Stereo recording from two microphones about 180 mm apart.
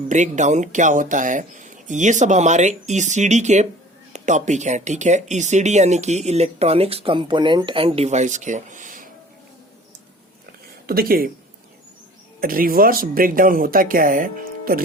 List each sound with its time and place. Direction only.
0.1 s speech: 40° right (ahead or behind)
10.8 s speech: 55° right (ahead or behind)
12.4 s speech: 50° right (ahead or behind)